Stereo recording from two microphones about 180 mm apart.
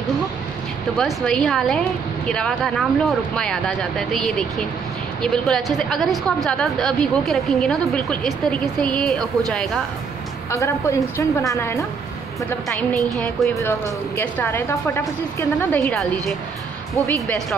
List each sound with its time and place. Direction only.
0.9 s a woman's voice: 5° left (ahead or behind)
10.5 s a woman's voice: 15° left (ahead or behind)
12.4 s a woman's voice: centre (ahead or behind)
13.6 s a woman's voice: 10° left (ahead or behind)